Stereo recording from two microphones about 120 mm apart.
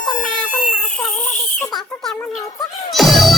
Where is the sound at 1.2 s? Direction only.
90° left.